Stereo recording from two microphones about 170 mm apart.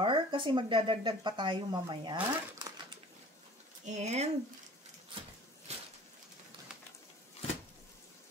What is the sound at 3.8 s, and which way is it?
Speech, 40° right (ahead or behind).